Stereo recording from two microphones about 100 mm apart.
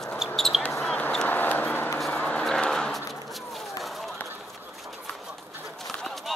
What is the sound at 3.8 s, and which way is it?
Run, centre (ahead or behind).